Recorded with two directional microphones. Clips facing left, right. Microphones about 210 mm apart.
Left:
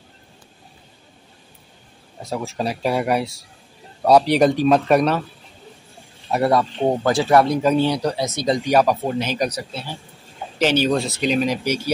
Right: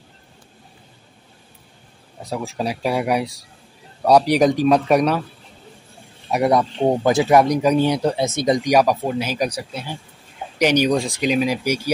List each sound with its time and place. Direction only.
2.2 s speech: 10° right (ahead or behind)
4.3 s speech: 10° right (ahead or behind)
6.3 s speech: 15° right (ahead or behind)